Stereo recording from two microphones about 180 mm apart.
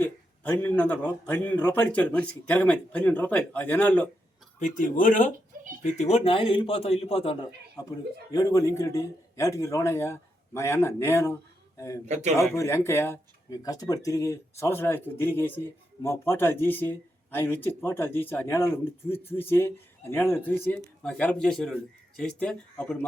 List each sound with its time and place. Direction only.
0.0 s speech: 10° left (ahead or behind)
4.6 s speech: 45° left (ahead or behind)
8.3 s speech: 20° left (ahead or behind)
12.0 s a man's voice: 40° right (ahead or behind)
12.4 s speech: 15° left (ahead or behind)